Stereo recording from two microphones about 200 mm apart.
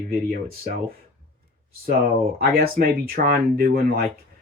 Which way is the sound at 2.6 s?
50° right (ahead or behind).